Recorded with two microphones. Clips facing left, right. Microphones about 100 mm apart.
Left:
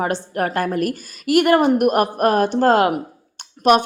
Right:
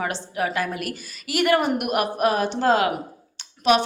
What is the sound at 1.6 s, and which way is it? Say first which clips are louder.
Speech: left 7 dB; 35° left (ahead or behind).